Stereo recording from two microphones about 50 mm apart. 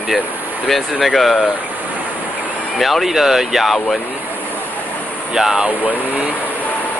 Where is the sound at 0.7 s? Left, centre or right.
Centre.